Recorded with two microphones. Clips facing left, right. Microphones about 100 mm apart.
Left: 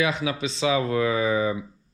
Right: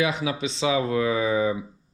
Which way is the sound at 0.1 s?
20° right (ahead or behind).